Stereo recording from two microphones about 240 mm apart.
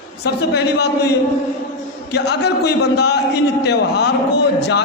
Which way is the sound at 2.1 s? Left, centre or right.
Left.